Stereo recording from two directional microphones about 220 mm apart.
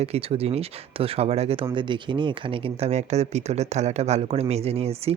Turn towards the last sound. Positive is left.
turn(degrees=-30)  # may be behind; listen again after turning